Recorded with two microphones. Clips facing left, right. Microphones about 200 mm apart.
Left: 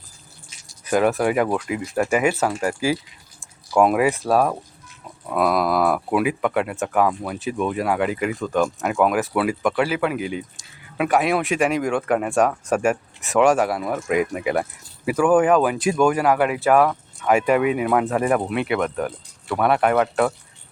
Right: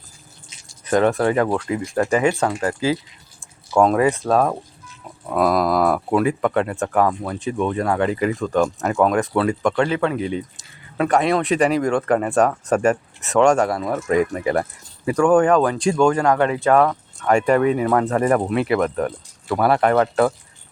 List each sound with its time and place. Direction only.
0.9 s speech: 5° left (ahead or behind)